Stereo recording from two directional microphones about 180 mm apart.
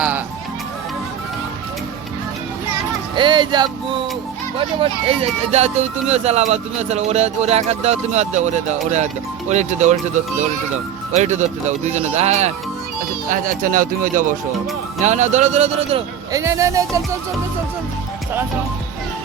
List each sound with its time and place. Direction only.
3.2 s music: 25° right (ahead or behind)
4.5 s speech: 30° right (ahead or behind)
13.2 s speech: 50° right (ahead or behind); by 16.0 s 35° right (ahead or behind)
16.3 s speech: 15° right (ahead or behind)